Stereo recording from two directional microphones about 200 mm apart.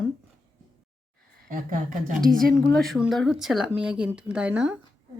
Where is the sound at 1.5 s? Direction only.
40° right (ahead or behind).